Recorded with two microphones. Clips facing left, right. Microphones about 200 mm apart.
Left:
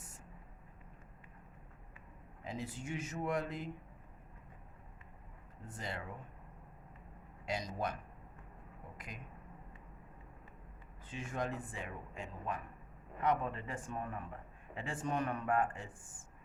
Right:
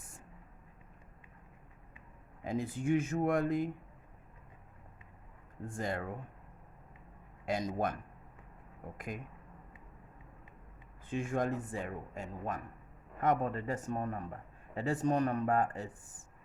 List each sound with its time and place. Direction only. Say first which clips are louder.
2.4 s a man's voice: right 8 dB; 50° right (ahead or behind)
5.6 s a man's voice: right 7 dB; 50° right (ahead or behind)
7.4 s a man's voice: right 5 dB; 50° right (ahead or behind)
9.0 s a man's voice: right 10 dB; 50° right (ahead or behind)
11.1 s a man's voice: right 7 dB; 50° right (ahead or behind)